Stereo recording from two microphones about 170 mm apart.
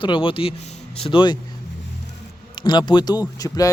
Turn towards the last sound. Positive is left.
turn(degrees=20)  # may be behind; listen again after turning